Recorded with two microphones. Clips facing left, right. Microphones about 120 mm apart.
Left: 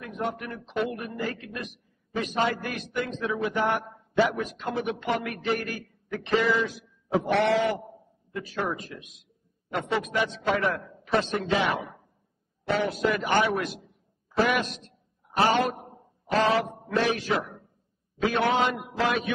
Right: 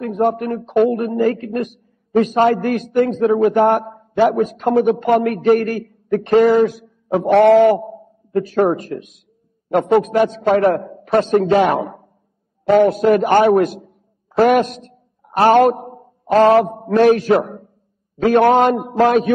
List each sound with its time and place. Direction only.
0.0 s a man's voice: 50° right (ahead or behind)